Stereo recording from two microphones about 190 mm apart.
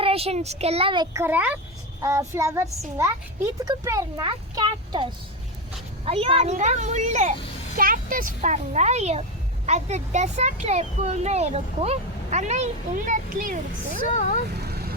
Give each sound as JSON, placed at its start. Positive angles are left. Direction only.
{"t": 0.0, "sound": "speech", "side_deg": -30}
{"t": 1.1, "sound": "a woman's voice", "side_deg": -10}
{"t": 6.1, "sound": "speech", "side_deg": -30}
{"t": 14.5, "sound": "vehicle", "side_deg": -55}